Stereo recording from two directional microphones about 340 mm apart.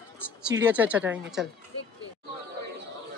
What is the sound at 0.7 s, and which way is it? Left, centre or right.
Speech, centre.